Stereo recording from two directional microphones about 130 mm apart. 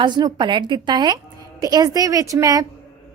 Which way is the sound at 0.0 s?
35° right (ahead or behind).